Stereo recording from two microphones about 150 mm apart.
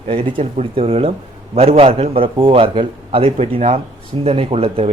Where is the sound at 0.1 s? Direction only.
35° right (ahead or behind).